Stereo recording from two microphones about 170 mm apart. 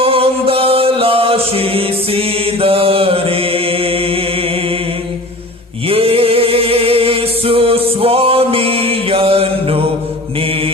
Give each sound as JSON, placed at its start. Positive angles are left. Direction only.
{"t": 0.0, "sound": "chant", "side_deg": -35}
{"t": 5.9, "sound": "music", "side_deg": -35}